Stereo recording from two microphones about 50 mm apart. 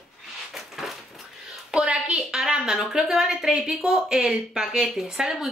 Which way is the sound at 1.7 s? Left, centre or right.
Right.